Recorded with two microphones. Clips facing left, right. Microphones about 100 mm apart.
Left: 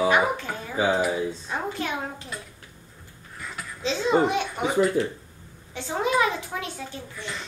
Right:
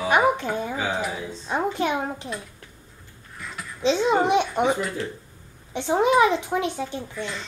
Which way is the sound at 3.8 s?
20° right (ahead or behind).